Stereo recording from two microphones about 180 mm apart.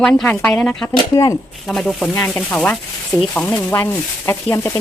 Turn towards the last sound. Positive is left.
turn(degrees=15)  # may be behind; listen again after turning